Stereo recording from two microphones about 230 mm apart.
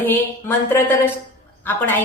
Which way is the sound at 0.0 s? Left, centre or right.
Centre.